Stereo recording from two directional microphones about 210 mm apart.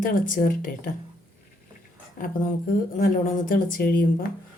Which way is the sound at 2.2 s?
40° left (ahead or behind).